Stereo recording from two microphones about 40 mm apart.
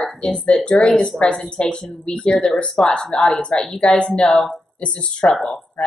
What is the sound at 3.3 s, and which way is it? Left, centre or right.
Speech, left.